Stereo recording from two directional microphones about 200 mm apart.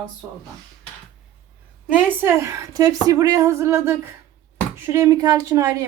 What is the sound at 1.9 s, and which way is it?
A woman's voice, 10° right (ahead or behind).